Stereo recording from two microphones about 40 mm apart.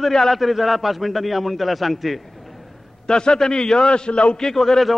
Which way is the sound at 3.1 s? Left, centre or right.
Left.